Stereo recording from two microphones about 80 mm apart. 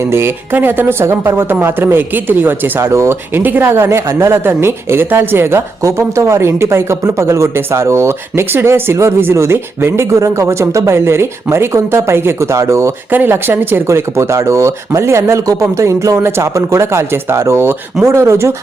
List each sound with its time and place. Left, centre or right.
0.0 s speech: right
3.3 s speech: right
13.1 s speech: right